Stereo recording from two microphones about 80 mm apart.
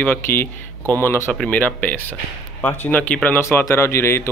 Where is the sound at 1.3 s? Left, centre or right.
Centre.